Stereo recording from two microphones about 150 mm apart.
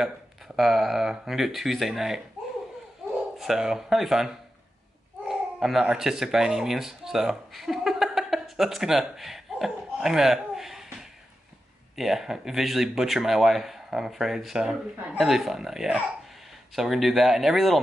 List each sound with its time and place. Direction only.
0.6 s speech: centre (ahead or behind)
3.3 s speech: 5° right (ahead or behind)